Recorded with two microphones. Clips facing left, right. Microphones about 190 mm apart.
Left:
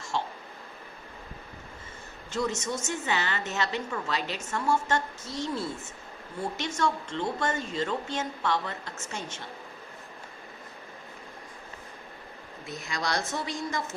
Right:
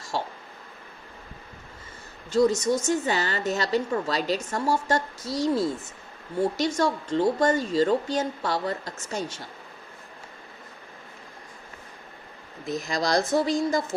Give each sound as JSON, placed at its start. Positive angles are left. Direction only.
{"t": 0.1, "sound": "a sound", "side_deg": -40}
{"t": 2.3, "sound": "a woman's voice", "side_deg": -35}
{"t": 12.6, "sound": "a woman's voice", "side_deg": -40}